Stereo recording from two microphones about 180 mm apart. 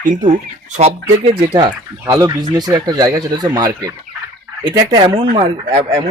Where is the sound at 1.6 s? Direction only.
20° right (ahead or behind).